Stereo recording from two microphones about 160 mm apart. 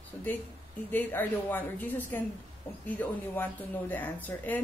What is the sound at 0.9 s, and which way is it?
A woman's voice, 10° left (ahead or behind).